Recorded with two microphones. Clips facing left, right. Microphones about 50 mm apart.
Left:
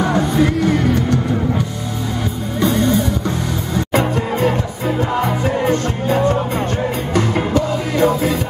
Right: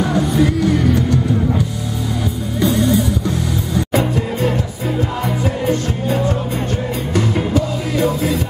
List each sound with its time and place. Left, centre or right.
0.0 s music: centre
2.6 s music: centre
7.5 s music: centre